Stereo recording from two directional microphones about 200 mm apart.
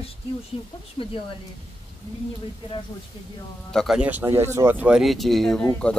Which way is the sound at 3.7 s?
Centre (ahead or behind).